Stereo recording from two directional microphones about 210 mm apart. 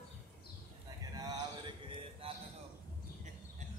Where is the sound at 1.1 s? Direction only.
20° right (ahead or behind).